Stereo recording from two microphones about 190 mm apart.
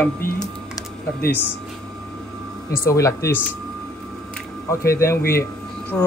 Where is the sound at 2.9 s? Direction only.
15° left (ahead or behind).